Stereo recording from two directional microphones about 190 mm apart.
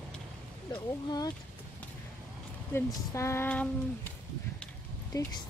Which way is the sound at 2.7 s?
15° left (ahead or behind).